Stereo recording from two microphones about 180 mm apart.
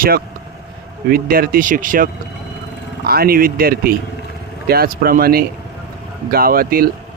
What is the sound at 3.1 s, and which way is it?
Speech, 55° right (ahead or behind).